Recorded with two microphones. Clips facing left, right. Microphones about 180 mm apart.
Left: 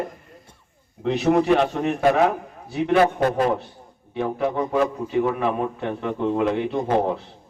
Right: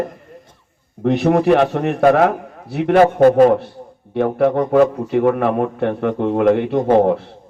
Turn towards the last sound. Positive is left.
turn(degrees=-60)  # may be behind; listen again after turning